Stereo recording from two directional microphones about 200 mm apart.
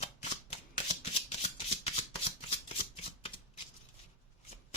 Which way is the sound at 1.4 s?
30° left (ahead or behind).